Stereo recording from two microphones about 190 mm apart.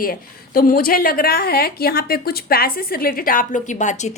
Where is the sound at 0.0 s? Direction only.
50° left (ahead or behind).